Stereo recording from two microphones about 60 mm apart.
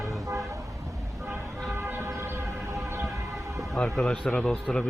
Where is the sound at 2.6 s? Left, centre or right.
Right.